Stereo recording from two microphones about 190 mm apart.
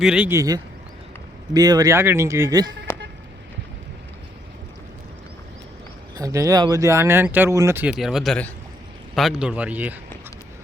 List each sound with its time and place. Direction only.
0.0 s speech: 5° right (ahead or behind)
0.3 s speech: 20° right (ahead or behind)
2.9 s vehicle: 10° left (ahead or behind)
6.1 s speech: 15° right (ahead or behind)